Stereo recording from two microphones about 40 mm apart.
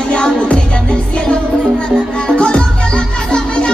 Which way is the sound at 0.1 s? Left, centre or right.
Left.